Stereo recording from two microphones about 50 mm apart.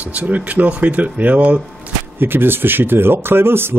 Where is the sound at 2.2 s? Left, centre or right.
Right.